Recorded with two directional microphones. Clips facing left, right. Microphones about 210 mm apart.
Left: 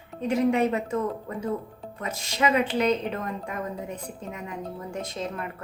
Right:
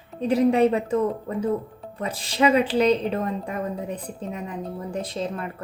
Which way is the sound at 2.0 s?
30° right (ahead or behind).